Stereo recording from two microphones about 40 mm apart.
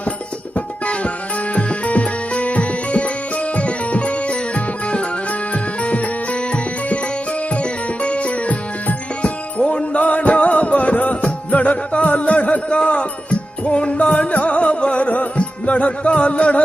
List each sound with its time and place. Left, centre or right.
0.5 s music: left